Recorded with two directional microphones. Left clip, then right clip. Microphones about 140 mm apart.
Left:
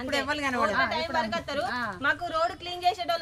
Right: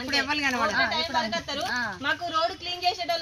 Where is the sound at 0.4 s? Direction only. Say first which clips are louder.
Right 1 dB; 60° left (ahead or behind).